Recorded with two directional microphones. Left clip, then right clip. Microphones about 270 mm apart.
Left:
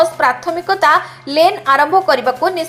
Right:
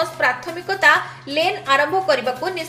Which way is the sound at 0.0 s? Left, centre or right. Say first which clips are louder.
Left 7 dB; centre.